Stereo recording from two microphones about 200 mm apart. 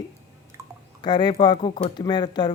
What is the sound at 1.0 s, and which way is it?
Speech, 20° left (ahead or behind).